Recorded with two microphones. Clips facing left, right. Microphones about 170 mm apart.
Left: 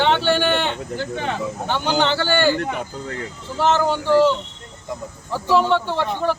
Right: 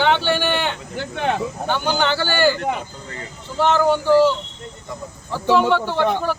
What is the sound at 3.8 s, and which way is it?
Speech, centre (ahead or behind).